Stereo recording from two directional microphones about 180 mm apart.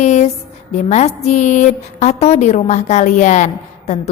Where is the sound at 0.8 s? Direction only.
40° left (ahead or behind).